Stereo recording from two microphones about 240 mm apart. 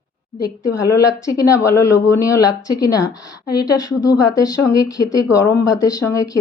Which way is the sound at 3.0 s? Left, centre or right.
Left.